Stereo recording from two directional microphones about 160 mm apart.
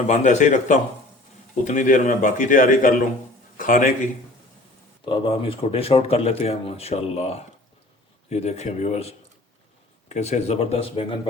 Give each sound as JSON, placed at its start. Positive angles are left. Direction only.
{"t": 0.1, "sound": "a man's voice", "side_deg": 45}
{"t": 5.0, "sound": "speech", "side_deg": 35}